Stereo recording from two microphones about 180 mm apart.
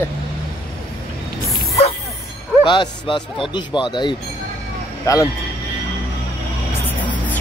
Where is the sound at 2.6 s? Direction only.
25° left (ahead or behind).